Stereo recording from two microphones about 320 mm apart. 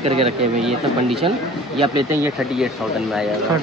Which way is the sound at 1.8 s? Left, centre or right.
Centre.